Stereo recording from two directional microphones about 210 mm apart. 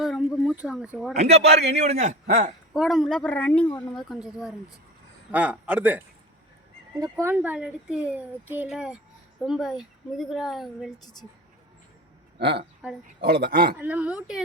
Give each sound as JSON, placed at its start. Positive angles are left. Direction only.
{"t": 0.0, "sound": "speech", "side_deg": 0}
{"t": 1.1, "sound": "a man's voice", "side_deg": -30}
{"t": 2.7, "sound": "a woman's voice", "side_deg": 0}
{"t": 7.0, "sound": "a woman's voice", "side_deg": -10}
{"t": 12.4, "sound": "speech", "side_deg": -55}
{"t": 13.7, "sound": "speech", "side_deg": -5}